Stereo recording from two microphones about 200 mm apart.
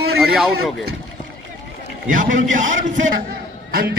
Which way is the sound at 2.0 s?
40° right (ahead or behind).